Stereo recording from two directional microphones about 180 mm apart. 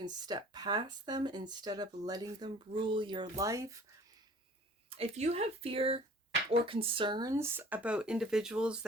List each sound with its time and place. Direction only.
0.0 s speech: 25° right (ahead or behind)
4.9 s speech: 35° right (ahead or behind); by 8.8 s 5° right (ahead or behind)